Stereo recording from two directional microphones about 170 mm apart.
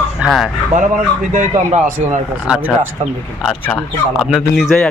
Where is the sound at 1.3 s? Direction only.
45° right (ahead or behind).